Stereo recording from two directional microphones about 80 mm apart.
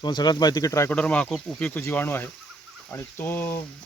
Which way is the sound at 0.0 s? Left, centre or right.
Left.